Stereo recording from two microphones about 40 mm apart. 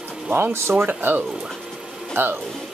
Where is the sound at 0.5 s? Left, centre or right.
Right.